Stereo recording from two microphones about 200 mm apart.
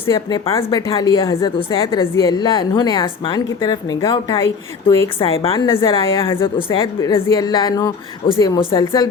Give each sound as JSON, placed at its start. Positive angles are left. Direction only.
{"t": 0.1, "sound": "a woman's voice", "side_deg": 20}
{"t": 1.4, "sound": "a woman's voice", "side_deg": 25}
{"t": 1.8, "sound": "a woman's voice", "side_deg": 15}